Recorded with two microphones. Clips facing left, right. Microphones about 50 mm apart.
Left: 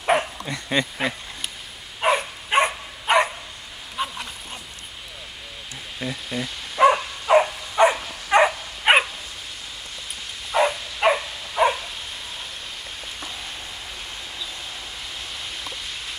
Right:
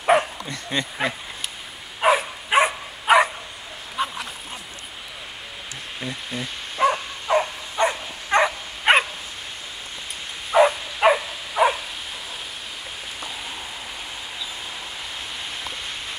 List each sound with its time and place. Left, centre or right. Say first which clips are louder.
0.0 s bow-wow: right 3 dB; centre
0.5 s speech: left 3 dB; centre
2.0 s dog: right 2 dB; centre
6.0 s speech: left 2 dB; centre
6.8 s a sound: left 4 dB; left
8.3 s dog: left 2 dB; centre
10.5 s dog: right 4 dB; centre